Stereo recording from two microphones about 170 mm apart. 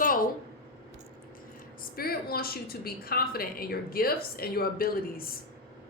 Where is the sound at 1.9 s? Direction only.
60° left (ahead or behind).